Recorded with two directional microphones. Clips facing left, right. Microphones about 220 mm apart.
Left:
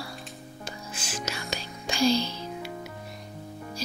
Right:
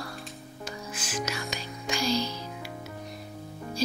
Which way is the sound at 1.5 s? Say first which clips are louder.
Even; 30° left (ahead or behind).